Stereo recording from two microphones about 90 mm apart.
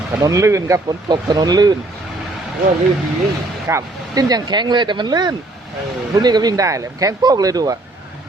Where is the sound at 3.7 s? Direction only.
30° right (ahead or behind).